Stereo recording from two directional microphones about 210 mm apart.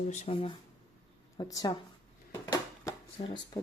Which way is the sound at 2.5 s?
20° left (ahead or behind).